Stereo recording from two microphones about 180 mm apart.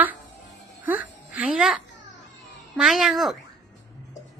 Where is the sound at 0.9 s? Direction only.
10° right (ahead or behind).